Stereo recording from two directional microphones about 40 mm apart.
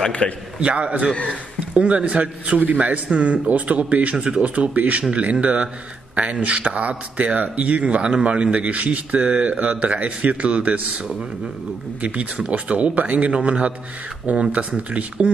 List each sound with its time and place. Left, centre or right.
0.2 s a man's voice: left
0.6 s speech: right
12.4 s speech: right
13.3 s speech: right
14.8 s speech: right